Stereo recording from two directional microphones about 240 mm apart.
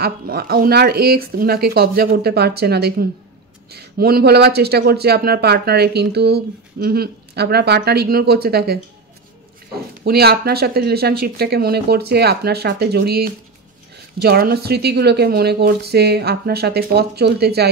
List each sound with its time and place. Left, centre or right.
0.0 s speech: right
10.0 s speech: right